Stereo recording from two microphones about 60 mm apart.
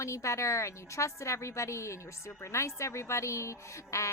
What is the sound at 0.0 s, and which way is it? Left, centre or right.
A woman's voice, left.